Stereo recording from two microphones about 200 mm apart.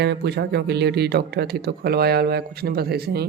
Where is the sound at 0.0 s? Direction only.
55° right (ahead or behind).